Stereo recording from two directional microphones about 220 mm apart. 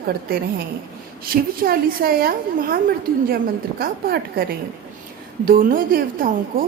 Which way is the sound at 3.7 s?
45° right (ahead or behind).